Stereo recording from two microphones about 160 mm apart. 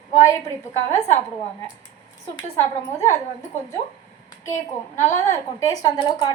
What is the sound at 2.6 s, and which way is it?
Speech, 15° left (ahead or behind).